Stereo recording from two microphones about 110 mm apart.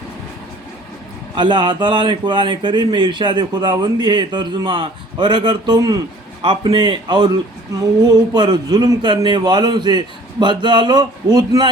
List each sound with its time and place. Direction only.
1.4 s a man's voice: 45° right (ahead or behind)